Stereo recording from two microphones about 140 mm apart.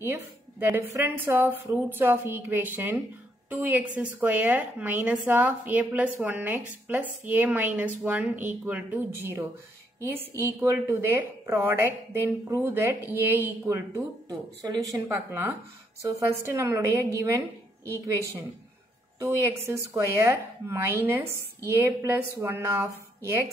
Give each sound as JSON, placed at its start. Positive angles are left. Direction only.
{"t": 0.0, "sound": "a woman's voice", "side_deg": -15}